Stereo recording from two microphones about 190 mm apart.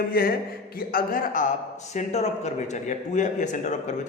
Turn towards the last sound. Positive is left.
turn(degrees=40)  # may be behind; listen again after turning